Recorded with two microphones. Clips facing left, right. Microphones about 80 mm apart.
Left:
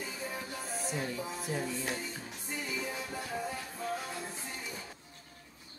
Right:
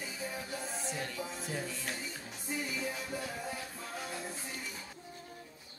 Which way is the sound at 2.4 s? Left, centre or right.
Centre.